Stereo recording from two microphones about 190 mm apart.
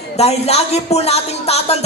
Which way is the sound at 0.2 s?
35° left (ahead or behind).